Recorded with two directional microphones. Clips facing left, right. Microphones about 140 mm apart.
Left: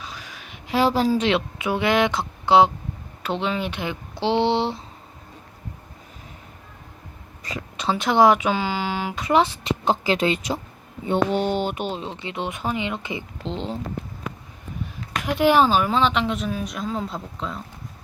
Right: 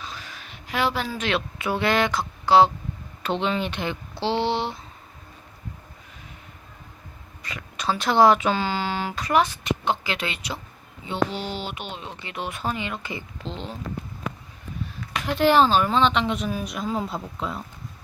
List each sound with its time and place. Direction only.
0.0 s a sound: 10° left (ahead or behind)
0.7 s a woman's voice: 35° left (ahead or behind)
1.2 s speech: 20° left (ahead or behind)
3.2 s speech: 5° left (ahead or behind); by 4.8 s 25° left (ahead or behind)
7.4 s a sound: 35° left (ahead or behind)
7.9 s speech: 20° left (ahead or behind); by 10.6 s 40° left (ahead or behind)
11.0 s speech: 50° left (ahead or behind); by 13.7 s 25° left (ahead or behind)
15.2 s speech: 15° left (ahead or behind); by 17.6 s 5° right (ahead or behind)